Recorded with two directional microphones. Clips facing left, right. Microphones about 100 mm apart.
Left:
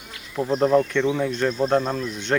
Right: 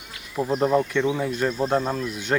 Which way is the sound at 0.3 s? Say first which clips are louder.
Left 2 dB; 10° right (ahead or behind).